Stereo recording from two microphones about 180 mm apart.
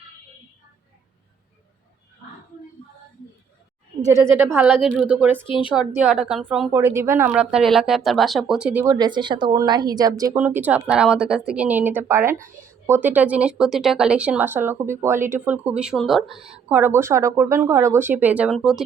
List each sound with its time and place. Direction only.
4.5 s speech: 10° right (ahead or behind)
5.5 s speech: 30° left (ahead or behind)
5.7 s a woman's voice: 5° right (ahead or behind)
7.5 s speech: centre (ahead or behind)